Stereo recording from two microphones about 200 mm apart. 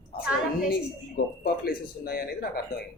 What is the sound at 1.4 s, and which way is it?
Speech, 50° left (ahead or behind).